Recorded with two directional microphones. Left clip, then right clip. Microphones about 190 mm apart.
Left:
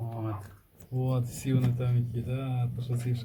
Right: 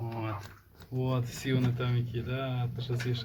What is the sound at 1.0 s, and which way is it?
Speech, 15° right (ahead or behind).